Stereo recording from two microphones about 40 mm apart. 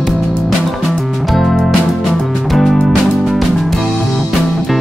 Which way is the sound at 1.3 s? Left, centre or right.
Centre.